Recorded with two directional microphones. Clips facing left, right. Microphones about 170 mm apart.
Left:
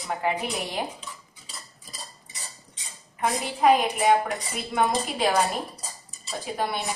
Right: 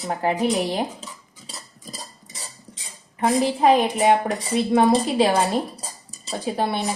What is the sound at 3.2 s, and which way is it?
Speech, 30° right (ahead or behind).